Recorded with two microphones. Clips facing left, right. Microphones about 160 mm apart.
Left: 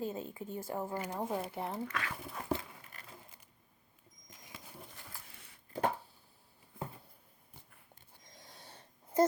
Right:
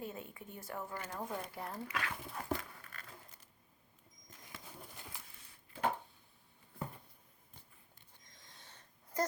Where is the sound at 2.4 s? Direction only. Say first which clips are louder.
Left 4 dB; 20° left (ahead or behind).